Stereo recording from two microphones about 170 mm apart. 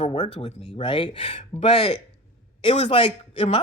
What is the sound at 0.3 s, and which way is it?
Speech, 30° left (ahead or behind).